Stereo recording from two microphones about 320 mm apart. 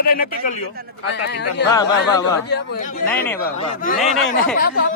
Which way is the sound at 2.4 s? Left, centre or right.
Left.